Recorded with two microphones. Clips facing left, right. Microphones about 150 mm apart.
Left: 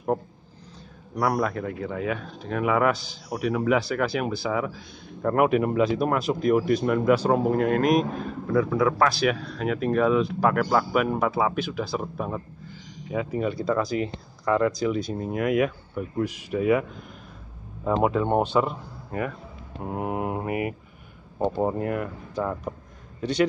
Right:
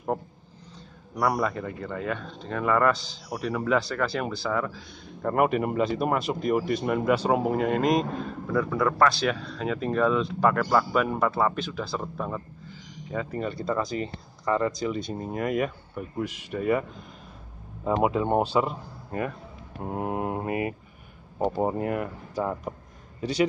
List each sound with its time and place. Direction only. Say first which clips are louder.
1.1 s speech: left 1 dB; centre (ahead or behind)
18.0 s speech: left 1 dB; 15° right (ahead or behind)
18.7 s a man's voice: left 1 dB; 25° right (ahead or behind)
20.0 s speech: left 1 dB; 15° left (ahead or behind)
21.4 s speech: left 1 dB; 10° right (ahead or behind)
21.7 s speech: left 1 dB; 25° right (ahead or behind)
22.3 s speech: left 1 dB; 10° right (ahead or behind)